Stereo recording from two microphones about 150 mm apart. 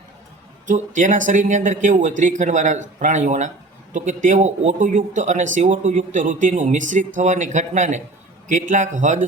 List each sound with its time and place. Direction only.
0.7 s speech: 55° right (ahead or behind)